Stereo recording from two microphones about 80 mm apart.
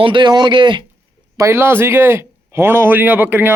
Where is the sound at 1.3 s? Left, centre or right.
Right.